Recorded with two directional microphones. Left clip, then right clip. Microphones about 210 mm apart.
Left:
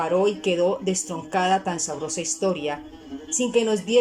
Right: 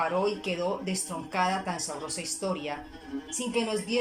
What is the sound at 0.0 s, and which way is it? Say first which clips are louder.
Speech: left 6 dB; 40° left (ahead or behind).